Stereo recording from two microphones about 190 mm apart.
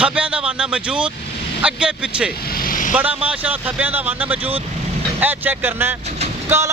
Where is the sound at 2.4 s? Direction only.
50° left (ahead or behind).